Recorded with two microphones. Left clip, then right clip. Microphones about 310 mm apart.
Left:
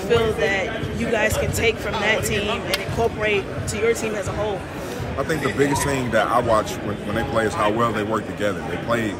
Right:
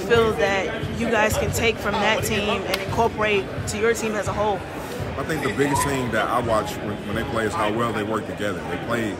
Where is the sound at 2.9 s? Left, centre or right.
Right.